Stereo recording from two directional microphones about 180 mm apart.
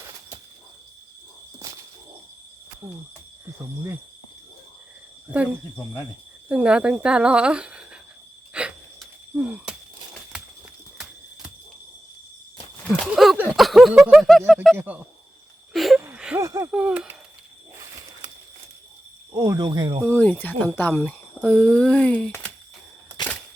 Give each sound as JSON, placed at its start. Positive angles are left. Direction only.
{"t": 2.8, "sound": "speech", "side_deg": -10}
{"t": 6.5, "sound": "speech", "side_deg": -5}
{"t": 8.5, "sound": "wheeze", "side_deg": -5}
{"t": 10.9, "sound": "squeal", "side_deg": -5}
{"t": 12.9, "sound": "speech", "side_deg": -5}
{"t": 15.7, "sound": "a sound", "side_deg": 0}
{"t": 16.4, "sound": "speech", "side_deg": -15}
{"t": 16.7, "sound": "speech", "side_deg": -5}
{"t": 19.3, "sound": "speech", "side_deg": -20}
{"t": 20.1, "sound": "speech", "side_deg": 10}